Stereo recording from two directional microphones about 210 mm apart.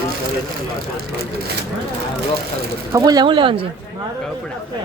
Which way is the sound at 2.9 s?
20° right (ahead or behind).